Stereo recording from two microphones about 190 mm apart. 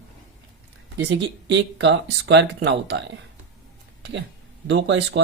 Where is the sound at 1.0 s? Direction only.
65° right (ahead or behind).